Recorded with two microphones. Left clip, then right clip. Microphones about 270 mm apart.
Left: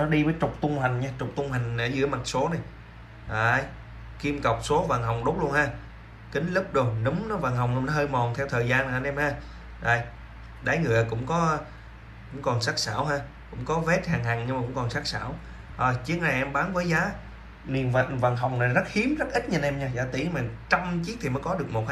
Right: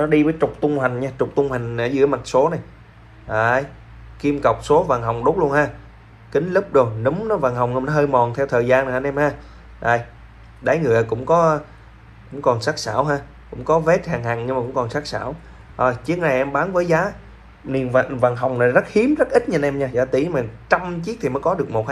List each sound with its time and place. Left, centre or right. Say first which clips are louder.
0.1 s speech: right 11 dB; right
0.7 s a man's voice: right 7 dB; centre
17.6 s speech: right 8 dB; centre